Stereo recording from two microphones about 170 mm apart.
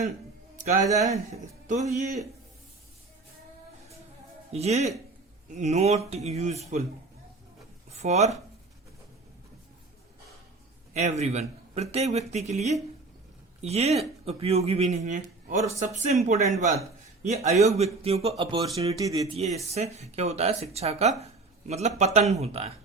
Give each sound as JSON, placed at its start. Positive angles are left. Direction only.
{"t": 0.5, "sound": "music", "side_deg": -50}
{"t": 0.9, "sound": "a man's voice", "side_deg": -40}
{"t": 4.5, "sound": "speech", "side_deg": -40}
{"t": 7.9, "sound": "speech", "side_deg": -40}
{"t": 10.9, "sound": "speech", "side_deg": -40}
{"t": 18.9, "sound": "speech", "side_deg": -20}
{"t": 19.3, "sound": "speech", "side_deg": -40}